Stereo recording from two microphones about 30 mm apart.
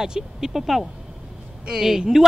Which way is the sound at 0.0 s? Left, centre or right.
Centre.